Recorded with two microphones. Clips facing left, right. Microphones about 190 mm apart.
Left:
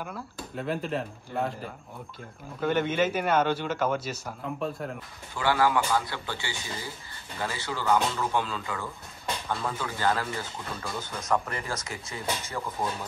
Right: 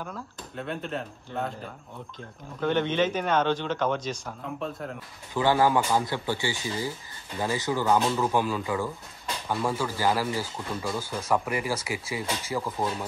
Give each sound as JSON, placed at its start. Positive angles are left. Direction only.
{"t": 0.0, "sound": "a man's voice", "side_deg": 5}
{"t": 5.3, "sound": "speech", "side_deg": -15}